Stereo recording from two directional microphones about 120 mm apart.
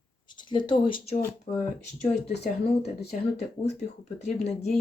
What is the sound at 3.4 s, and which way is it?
Speech, 70° left (ahead or behind).